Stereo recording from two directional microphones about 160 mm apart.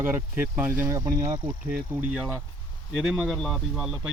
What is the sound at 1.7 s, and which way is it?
Speech, 5° right (ahead or behind).